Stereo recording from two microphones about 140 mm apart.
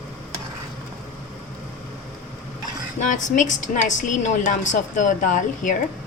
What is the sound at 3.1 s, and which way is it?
A woman's voice, 60° left (ahead or behind).